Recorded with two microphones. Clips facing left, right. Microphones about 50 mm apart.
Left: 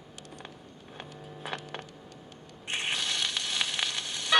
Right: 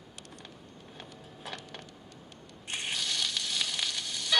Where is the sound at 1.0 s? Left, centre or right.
Left.